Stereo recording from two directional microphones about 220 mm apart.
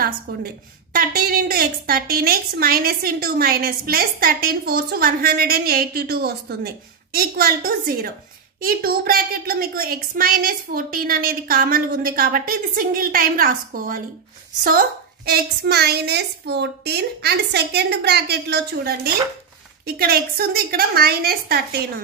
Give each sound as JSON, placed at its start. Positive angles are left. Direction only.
{"t": 0.9, "sound": "a woman's voice", "side_deg": -40}